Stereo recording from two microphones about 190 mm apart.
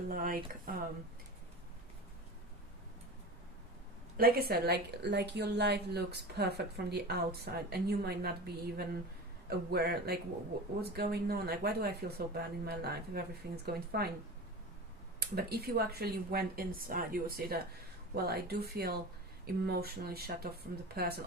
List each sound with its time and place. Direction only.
0.1 s speech: 45° right (ahead or behind)
4.2 s a woman's voice: 55° right (ahead or behind)
15.4 s a woman's voice: 55° right (ahead or behind)